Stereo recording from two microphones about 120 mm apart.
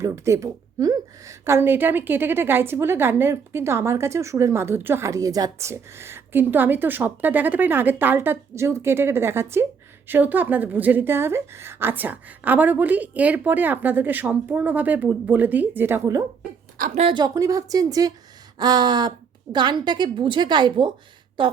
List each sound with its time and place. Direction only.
0.0 s a woman's voice: 25° right (ahead or behind)
17.1 s a woman's voice: 35° right (ahead or behind)